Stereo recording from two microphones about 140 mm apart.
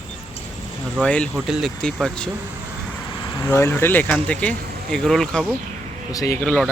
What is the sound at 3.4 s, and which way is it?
Speech, 20° left (ahead or behind).